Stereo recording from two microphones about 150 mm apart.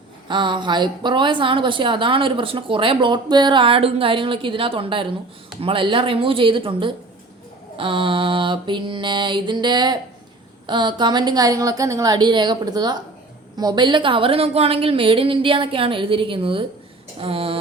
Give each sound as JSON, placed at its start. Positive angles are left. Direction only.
{"t": 0.3, "sound": "a woman's voice", "side_deg": -30}